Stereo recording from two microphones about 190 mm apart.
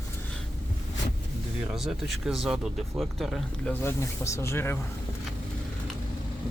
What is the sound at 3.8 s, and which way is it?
Speech, 15° left (ahead or behind).